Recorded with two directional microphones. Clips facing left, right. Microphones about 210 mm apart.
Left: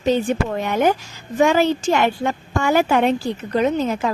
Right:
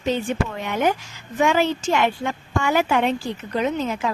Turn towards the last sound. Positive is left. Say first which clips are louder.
# left 4 dB
turn(degrees=40)  # may be behind; listen again after turning